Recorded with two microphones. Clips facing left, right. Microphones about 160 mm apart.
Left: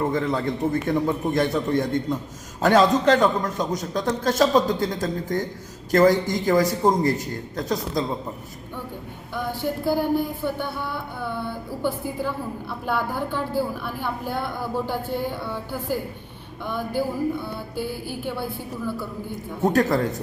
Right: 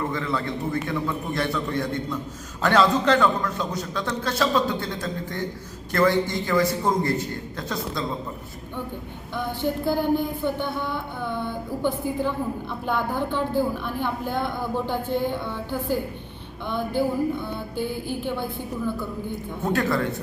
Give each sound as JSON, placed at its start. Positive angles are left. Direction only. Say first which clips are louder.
{"t": 0.0, "sound": "a man's voice", "louder": "left 4 dB", "side_deg": 45}
{"t": 9.3, "sound": "a woman's voice", "louder": "right 1 dB", "side_deg": 10}
{"t": 19.6, "sound": "a man's voice", "louder": "left 4 dB", "side_deg": 40}